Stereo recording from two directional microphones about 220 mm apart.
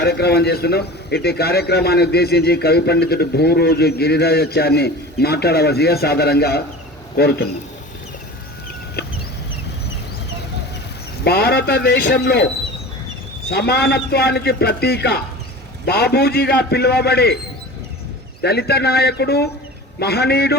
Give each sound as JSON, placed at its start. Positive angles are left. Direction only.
{"t": 0.0, "sound": "a man's voice", "side_deg": 45}
{"t": 9.0, "sound": "chicken", "side_deg": 45}
{"t": 11.2, "sound": "a man's voice", "side_deg": 45}
{"t": 13.5, "sound": "a man's voice", "side_deg": 45}
{"t": 18.4, "sound": "a man's voice", "side_deg": 45}